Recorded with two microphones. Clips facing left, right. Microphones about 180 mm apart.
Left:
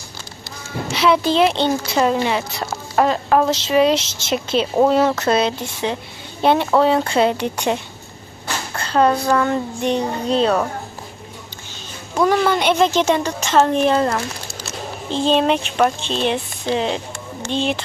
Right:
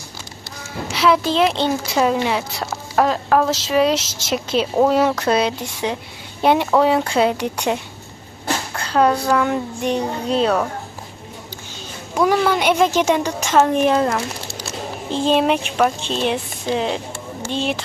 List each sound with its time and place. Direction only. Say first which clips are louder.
0.9 s a child's voice: left 1 dB; centre (ahead or behind)
8.8 s a sound: left 1 dB; 5° right (ahead or behind)
9.3 s a child's voice: left 1 dB; 10° right (ahead or behind)
12.1 s a child's voice: even; 10° right (ahead or behind)